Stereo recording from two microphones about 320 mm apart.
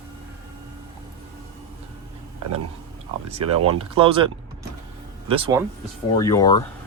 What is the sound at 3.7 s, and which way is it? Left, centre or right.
Speech, centre.